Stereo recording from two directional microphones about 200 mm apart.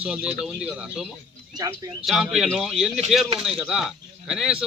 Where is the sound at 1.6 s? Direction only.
15° right (ahead or behind).